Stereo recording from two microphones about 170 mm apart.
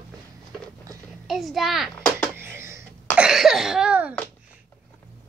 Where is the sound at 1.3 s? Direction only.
Centre (ahead or behind).